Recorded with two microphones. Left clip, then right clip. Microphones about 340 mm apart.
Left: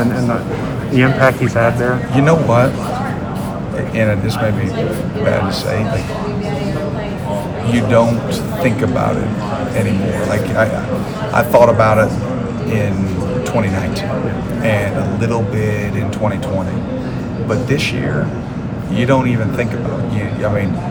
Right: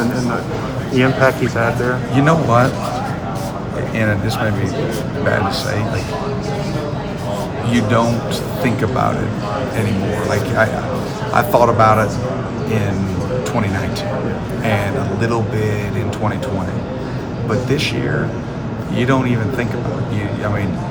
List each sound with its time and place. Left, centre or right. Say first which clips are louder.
0.9 s a man's voice: left 2 dB; left
2.1 s a man's voice: left 1 dB; centre
7.7 s speech: left 4 dB; centre
11.3 s a man's voice: left 3 dB; centre
15.2 s speech: even; centre
18.9 s a man's voice: left 3 dB; centre